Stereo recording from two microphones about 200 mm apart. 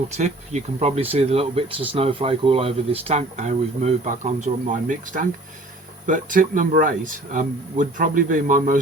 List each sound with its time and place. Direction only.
0.1 s speech: 35° right (ahead or behind)